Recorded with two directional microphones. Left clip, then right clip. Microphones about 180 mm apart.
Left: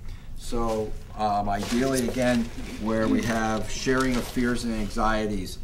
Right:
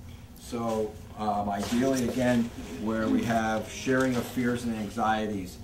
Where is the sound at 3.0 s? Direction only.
30° left (ahead or behind).